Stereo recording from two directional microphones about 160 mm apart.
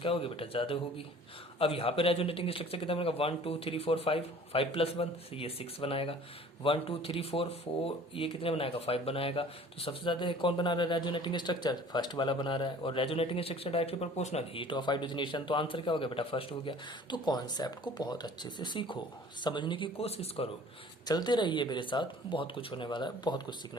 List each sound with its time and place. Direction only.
0.0 s speech: 35° left (ahead or behind)
21.1 s speech: 25° left (ahead or behind)